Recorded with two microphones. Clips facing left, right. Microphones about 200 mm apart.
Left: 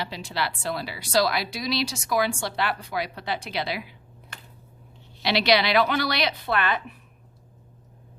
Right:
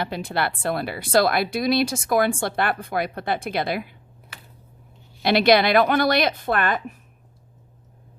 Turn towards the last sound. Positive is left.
turn(degrees=-45)  # may be behind; listen again after turning